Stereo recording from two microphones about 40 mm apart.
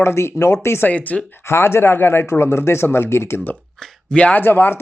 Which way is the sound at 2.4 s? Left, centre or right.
Left.